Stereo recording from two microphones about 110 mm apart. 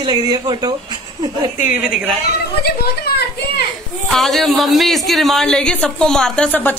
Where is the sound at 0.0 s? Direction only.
40° right (ahead or behind).